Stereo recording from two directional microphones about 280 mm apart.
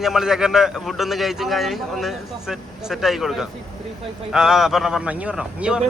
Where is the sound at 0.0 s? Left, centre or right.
Centre.